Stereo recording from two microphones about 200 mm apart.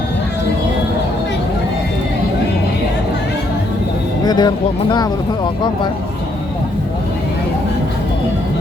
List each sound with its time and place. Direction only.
4.3 s speech: 20° left (ahead or behind)